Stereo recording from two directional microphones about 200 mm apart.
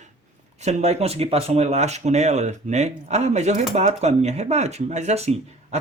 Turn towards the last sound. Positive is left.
turn(degrees=-35)  # may be behind; listen again after turning